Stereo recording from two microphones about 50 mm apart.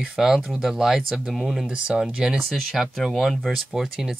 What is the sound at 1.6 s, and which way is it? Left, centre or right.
Speech, centre.